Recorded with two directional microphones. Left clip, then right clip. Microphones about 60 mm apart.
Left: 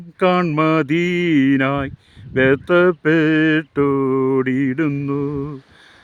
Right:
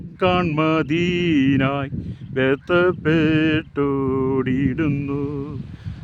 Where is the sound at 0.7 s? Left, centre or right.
Left.